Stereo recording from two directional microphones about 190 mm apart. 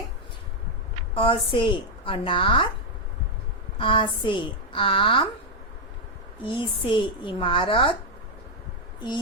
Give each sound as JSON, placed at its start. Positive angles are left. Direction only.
{"t": 1.1, "sound": "a woman's voice", "side_deg": 30}
{"t": 3.8, "sound": "a woman's voice", "side_deg": 25}
{"t": 6.4, "sound": "a woman's voice", "side_deg": 25}